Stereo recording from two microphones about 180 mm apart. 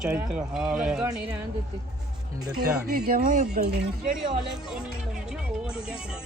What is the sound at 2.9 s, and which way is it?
Speech, 55° right (ahead or behind).